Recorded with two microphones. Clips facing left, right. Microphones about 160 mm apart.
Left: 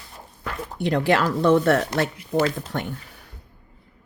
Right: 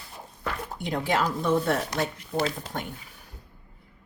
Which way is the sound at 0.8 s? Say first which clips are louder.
Left 6 dB; 75° left (ahead or behind).